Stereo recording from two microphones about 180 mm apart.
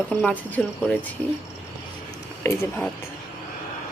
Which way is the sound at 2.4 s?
10° left (ahead or behind).